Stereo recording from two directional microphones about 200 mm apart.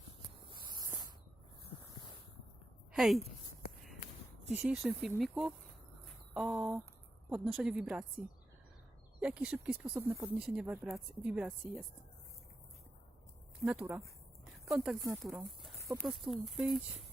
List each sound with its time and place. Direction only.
0.7 s spray: 20° right (ahead or behind)
2.9 s a woman's voice: centre (ahead or behind)
4.4 s speech: 5° right (ahead or behind)
9.2 s speech: 5° right (ahead or behind)
13.6 s speech: 5° right (ahead or behind)